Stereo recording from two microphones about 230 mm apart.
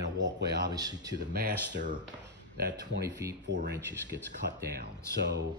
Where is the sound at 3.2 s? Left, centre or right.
Centre.